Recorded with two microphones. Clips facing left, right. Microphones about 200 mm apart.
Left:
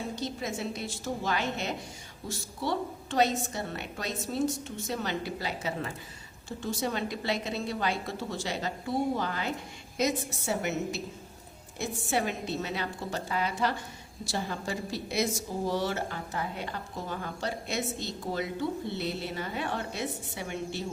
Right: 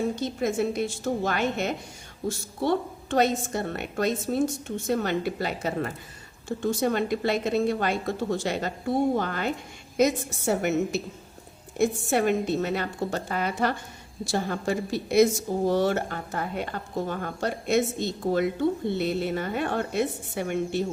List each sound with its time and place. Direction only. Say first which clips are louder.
0.2 s a woman's voice: right 8 dB; 55° right (ahead or behind)